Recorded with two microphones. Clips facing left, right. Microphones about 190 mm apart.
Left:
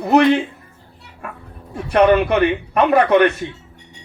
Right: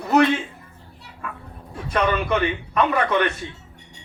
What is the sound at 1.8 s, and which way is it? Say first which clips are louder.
A man's voice: left 9 dB; 60° left (ahead or behind).